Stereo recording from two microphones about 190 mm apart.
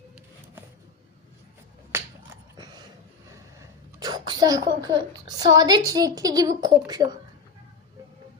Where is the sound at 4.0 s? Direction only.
20° right (ahead or behind).